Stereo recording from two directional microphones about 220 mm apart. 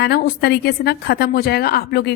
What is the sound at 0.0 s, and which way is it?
A woman's voice, 45° left (ahead or behind).